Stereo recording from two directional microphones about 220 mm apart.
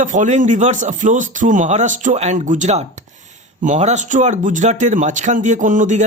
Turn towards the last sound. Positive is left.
turn(degrees=-35)  # may be behind; listen again after turning